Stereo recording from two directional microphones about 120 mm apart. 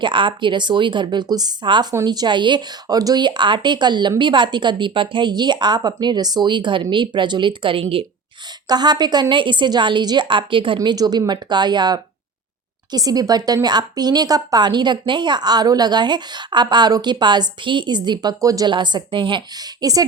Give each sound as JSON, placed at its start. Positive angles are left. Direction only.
{"t": 0.0, "sound": "a woman's voice", "side_deg": -40}
{"t": 8.7, "sound": "a woman's voice", "side_deg": -35}
{"t": 10.8, "sound": "a woman's voice", "side_deg": -30}
{"t": 18.7, "sound": "speech", "side_deg": -40}
{"t": 19.8, "sound": "a woman's voice", "side_deg": -30}